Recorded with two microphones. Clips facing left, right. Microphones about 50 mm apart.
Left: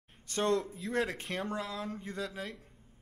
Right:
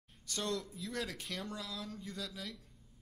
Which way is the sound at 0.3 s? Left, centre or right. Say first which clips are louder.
Left 8 dB; left.